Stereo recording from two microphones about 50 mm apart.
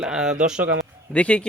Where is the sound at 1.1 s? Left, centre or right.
Left.